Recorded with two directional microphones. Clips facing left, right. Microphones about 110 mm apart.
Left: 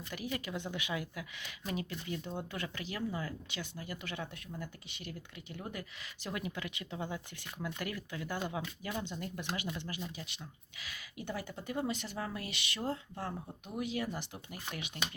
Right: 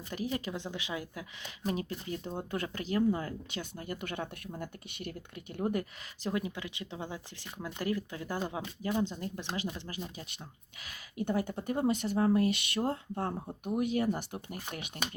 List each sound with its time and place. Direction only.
0.1 s speech: 35° right (ahead or behind)
6.2 s speech: 25° right (ahead or behind)
10.8 s speech: 45° right (ahead or behind)
12.8 s speech: 30° right (ahead or behind)
13.7 s speech: 50° right (ahead or behind)